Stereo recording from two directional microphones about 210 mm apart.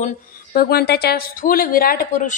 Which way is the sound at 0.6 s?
50° left (ahead or behind).